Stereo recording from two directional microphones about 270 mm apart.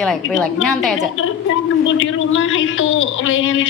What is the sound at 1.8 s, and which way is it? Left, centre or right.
Speech, left.